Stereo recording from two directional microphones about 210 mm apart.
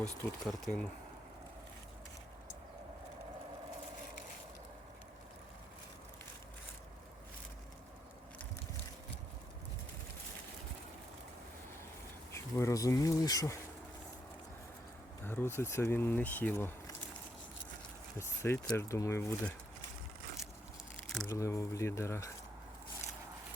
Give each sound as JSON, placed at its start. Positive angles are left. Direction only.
{"t": 0.4, "sound": "speech", "side_deg": 0}
{"t": 12.3, "sound": "speech", "side_deg": 15}
{"t": 15.2, "sound": "speech", "side_deg": 10}
{"t": 18.2, "sound": "speech", "side_deg": 10}
{"t": 21.2, "sound": "speech", "side_deg": 15}